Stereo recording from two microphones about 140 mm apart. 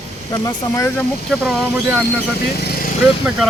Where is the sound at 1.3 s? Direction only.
5° left (ahead or behind).